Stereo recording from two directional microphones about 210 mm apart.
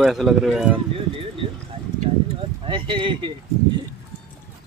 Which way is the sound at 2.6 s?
25° right (ahead or behind).